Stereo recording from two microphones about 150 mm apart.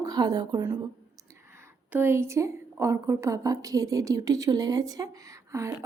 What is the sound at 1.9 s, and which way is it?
A woman's voice, 15° right (ahead or behind).